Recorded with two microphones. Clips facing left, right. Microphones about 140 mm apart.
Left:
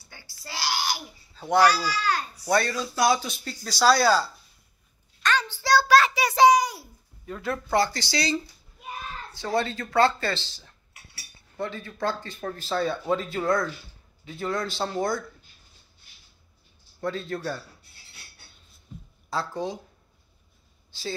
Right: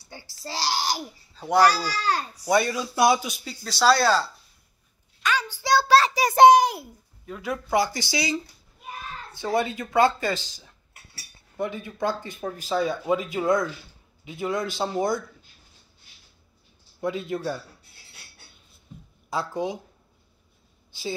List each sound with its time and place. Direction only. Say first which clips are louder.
0.1 s a child's voice: right 5 dB; 30° right (ahead or behind)
2.4 s speech: right 2 dB; 15° right (ahead or behind)
3.6 s speech: even; centre (ahead or behind)
5.2 s a sound: left 1 dB; 10° right (ahead or behind)
5.6 s child singing: right 1 dB; 20° right (ahead or behind); by 6.8 s 55° right (ahead or behind)
7.2 s speech: even; 5° right (ahead or behind)
9.4 s a man's voice: right 2 dB; 20° right (ahead or behind)
17.0 s speech: right 2 dB; 15° right (ahead or behind)
19.3 s speech: right 2 dB; 20° right (ahead or behind)